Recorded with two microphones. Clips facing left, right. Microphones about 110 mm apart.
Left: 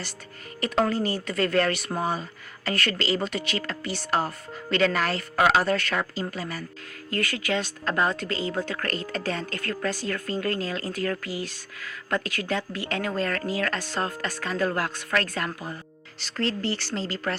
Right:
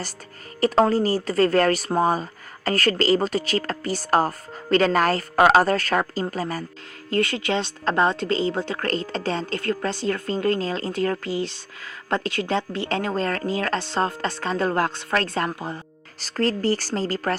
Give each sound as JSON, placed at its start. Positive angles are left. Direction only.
{"t": 0.6, "sound": "a woman's voice", "side_deg": -35}
{"t": 7.1, "sound": "a woman's voice", "side_deg": -25}
{"t": 16.2, "sound": "a woman's voice", "side_deg": -40}